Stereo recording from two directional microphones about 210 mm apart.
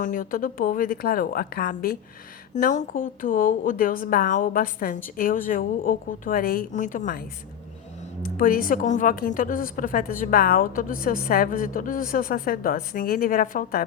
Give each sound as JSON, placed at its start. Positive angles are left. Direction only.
{"t": 0.0, "sound": "a woman's voice", "side_deg": 40}